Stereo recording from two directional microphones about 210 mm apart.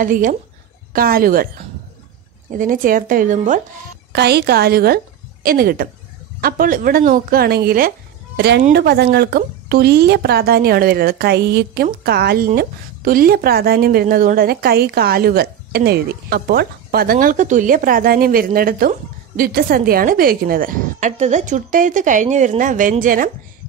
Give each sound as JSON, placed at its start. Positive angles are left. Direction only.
{"t": 0.0, "sound": "speech", "side_deg": -40}
{"t": 2.5, "sound": "speech", "side_deg": -40}
{"t": 4.1, "sound": "a woman's voice", "side_deg": -50}